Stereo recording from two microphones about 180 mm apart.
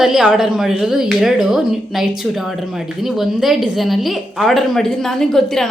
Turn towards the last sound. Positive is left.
turn(degrees=0)  # may be behind; listen again after turning